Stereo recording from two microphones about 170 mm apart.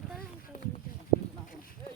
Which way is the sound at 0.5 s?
45° left (ahead or behind).